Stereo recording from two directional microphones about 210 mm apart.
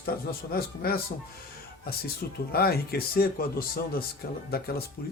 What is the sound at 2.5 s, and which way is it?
Speech, 45° left (ahead or behind).